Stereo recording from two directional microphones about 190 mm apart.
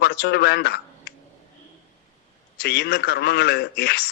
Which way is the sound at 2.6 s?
60° left (ahead or behind).